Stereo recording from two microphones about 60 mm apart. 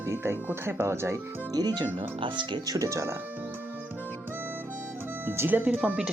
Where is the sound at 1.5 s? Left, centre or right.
Right.